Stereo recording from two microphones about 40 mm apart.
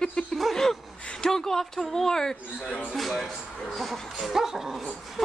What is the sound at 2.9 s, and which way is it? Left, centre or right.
Speech, centre.